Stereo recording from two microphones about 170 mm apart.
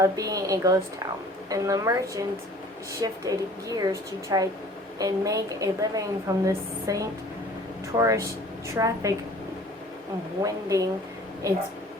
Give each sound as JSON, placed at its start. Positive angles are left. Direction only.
{"t": 0.0, "sound": "a woman's voice", "side_deg": -20}
{"t": 10.4, "sound": "a woman's voice", "side_deg": -20}